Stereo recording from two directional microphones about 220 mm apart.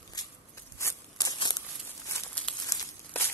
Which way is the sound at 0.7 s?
15° left (ahead or behind).